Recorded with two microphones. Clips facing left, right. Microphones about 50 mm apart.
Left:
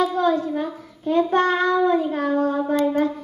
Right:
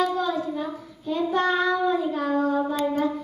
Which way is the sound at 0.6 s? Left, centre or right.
Left.